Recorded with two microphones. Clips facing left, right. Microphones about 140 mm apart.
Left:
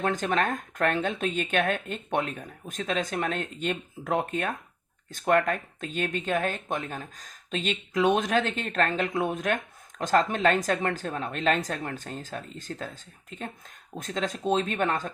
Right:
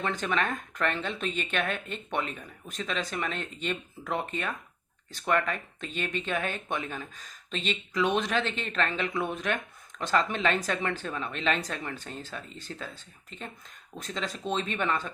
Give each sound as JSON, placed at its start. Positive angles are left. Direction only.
{"t": 0.0, "sound": "speech", "side_deg": 45}